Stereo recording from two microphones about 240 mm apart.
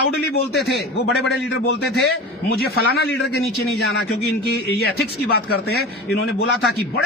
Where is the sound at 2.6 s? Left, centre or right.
Left.